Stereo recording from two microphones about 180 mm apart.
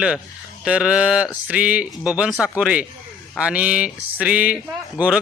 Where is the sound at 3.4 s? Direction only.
5° right (ahead or behind).